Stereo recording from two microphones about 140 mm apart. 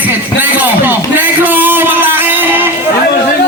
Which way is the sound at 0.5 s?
15° right (ahead or behind).